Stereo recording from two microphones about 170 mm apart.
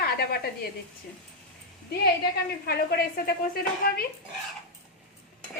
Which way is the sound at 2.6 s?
65° left (ahead or behind).